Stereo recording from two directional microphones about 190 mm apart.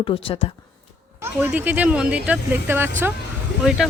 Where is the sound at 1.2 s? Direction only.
10° right (ahead or behind).